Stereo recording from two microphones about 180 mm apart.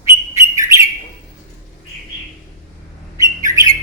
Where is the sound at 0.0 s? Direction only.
15° right (ahead or behind).